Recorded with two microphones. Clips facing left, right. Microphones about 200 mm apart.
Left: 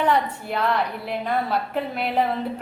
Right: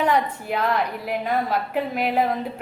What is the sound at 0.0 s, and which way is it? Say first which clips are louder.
A woman's voice: even; 10° right (ahead or behind).